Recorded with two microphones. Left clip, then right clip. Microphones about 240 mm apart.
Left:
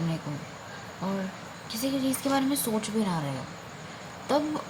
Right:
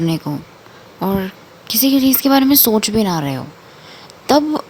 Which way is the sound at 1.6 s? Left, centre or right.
Right.